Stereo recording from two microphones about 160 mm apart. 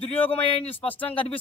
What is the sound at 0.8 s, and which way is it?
Speech, 10° left (ahead or behind).